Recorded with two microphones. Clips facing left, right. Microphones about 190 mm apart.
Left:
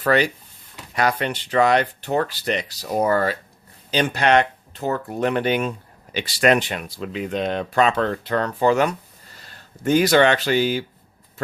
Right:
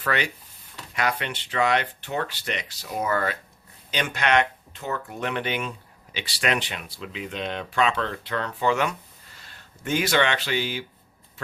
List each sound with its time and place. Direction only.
0.0 s speech: 35° left (ahead or behind)